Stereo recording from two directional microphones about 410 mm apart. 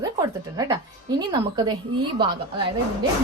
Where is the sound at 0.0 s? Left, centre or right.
Centre.